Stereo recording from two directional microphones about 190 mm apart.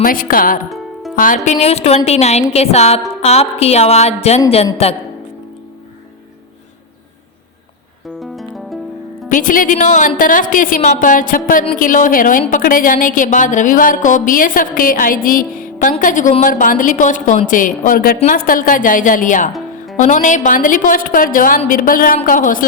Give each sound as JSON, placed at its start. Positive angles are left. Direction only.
{"t": 0.0, "sound": "a woman's voice", "side_deg": 45}
{"t": 1.5, "sound": "speech", "side_deg": 35}
{"t": 8.2, "sound": "music", "side_deg": 0}
{"t": 9.3, "sound": "a woman's voice", "side_deg": 45}